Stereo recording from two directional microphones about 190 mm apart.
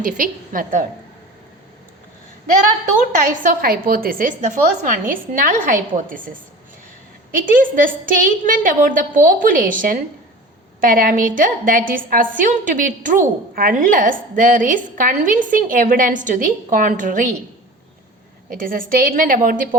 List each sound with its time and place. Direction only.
0.0 s a woman's voice: 45° right (ahead or behind)
3.0 s a woman's voice: 45° right (ahead or behind)
18.4 s a woman's voice: 50° right (ahead or behind)